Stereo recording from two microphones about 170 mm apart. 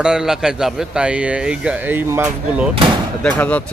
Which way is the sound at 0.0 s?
5° right (ahead or behind).